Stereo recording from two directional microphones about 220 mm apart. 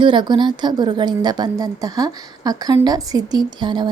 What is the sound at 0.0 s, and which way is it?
A woman's voice, 20° right (ahead or behind).